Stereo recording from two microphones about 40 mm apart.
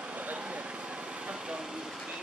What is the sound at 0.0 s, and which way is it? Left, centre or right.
Vehicle, right.